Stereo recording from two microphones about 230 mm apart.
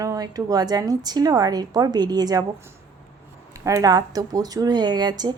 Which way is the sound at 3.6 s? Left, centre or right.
Centre.